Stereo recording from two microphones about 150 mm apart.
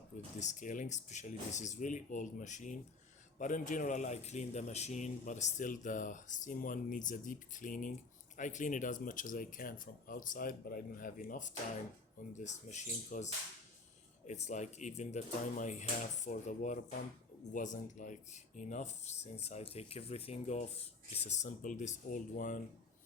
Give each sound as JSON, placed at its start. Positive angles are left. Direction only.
{"t": 0.3, "sound": "speech", "side_deg": 55}